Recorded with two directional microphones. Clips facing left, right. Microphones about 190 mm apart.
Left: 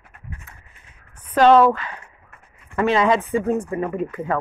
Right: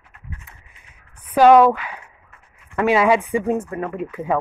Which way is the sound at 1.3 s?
10° right (ahead or behind).